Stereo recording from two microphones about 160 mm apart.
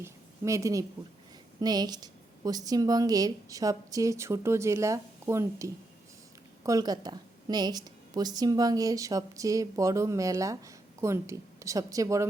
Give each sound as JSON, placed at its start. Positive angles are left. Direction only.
{"t": 0.0, "sound": "a woman's voice", "side_deg": -20}